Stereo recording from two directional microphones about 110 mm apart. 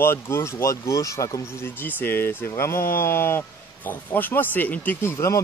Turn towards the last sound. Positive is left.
turn(degrees=25)  # may be behind; listen again after turning